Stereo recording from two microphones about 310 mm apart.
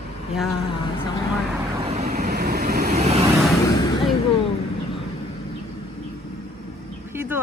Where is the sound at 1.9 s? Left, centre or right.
Right.